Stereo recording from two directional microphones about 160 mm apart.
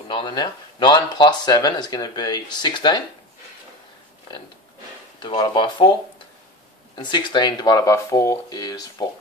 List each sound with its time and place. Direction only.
0.1 s speech: 30° left (ahead or behind)
5.2 s speech: 30° left (ahead or behind)
7.0 s speech: 30° left (ahead or behind)